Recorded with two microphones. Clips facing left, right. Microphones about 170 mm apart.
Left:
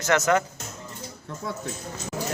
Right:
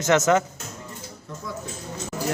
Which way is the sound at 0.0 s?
20° right (ahead or behind).